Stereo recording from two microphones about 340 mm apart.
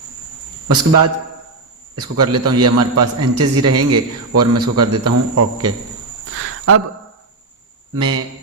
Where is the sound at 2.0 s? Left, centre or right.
Right.